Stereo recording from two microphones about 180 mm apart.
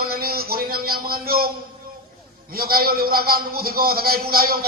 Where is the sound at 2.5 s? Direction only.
55° right (ahead or behind).